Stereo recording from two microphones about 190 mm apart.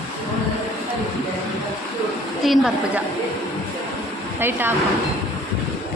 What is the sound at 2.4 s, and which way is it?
Speech, centre (ahead or behind).